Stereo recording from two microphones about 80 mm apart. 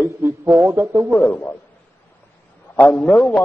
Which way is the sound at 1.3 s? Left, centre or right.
Left.